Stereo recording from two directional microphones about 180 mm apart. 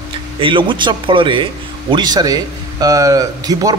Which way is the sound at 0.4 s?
30° right (ahead or behind).